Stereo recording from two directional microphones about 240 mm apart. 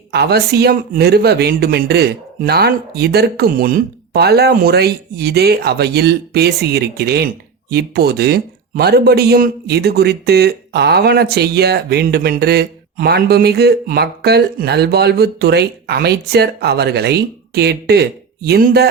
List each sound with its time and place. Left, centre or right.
0.1 s speech: right